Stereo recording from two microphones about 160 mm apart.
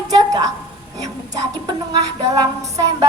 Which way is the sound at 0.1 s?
25° right (ahead or behind).